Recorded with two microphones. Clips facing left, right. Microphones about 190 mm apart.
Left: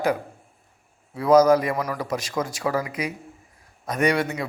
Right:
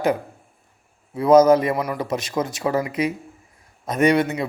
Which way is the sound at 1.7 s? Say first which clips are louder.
Right 2 dB; 10° right (ahead or behind).